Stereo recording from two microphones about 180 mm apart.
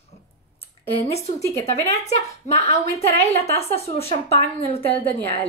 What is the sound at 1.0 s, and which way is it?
Speech, 15° left (ahead or behind).